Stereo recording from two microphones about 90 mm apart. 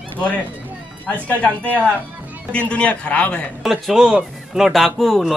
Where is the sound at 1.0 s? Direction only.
15° left (ahead or behind).